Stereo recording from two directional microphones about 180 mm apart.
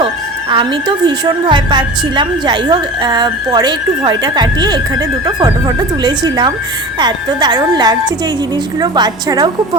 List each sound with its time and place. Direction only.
0.5 s a woman's voice: 25° right (ahead or behind)